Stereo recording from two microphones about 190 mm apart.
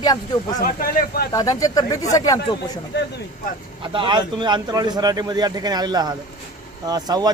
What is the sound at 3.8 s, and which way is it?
Speech, 25° right (ahead or behind).